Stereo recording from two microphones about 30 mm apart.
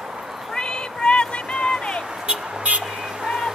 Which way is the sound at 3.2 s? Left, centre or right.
Centre.